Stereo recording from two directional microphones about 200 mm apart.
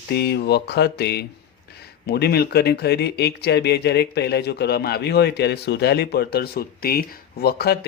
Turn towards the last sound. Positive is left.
turn(degrees=50)  # may be behind; listen again after turning